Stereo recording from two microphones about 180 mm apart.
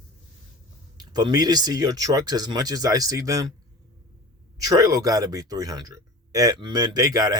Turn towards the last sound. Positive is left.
turn(degrees=-20)  # may be behind; listen again after turning